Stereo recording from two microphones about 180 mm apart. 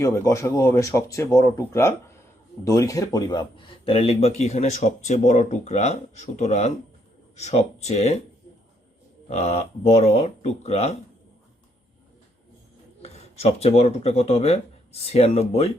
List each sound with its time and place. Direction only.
0.0 s speech: 15° left (ahead or behind); by 8.2 s 40° left (ahead or behind)
9.3 s speech: 35° left (ahead or behind)
13.0 s speech: 35° left (ahead or behind)